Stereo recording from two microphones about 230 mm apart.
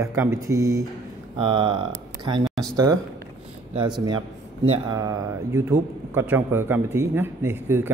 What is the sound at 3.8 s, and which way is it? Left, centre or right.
A man's voice, centre.